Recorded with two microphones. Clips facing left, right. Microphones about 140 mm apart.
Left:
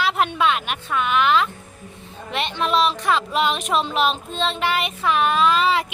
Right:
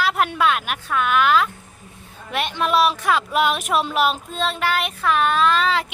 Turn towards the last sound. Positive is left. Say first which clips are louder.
# left 1 dB
turn(degrees=5)  # may be behind; listen again after turning